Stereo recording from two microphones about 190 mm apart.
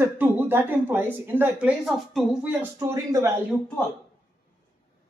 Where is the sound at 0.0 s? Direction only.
10° right (ahead or behind).